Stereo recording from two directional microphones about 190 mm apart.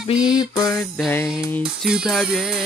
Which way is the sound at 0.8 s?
Centre (ahead or behind).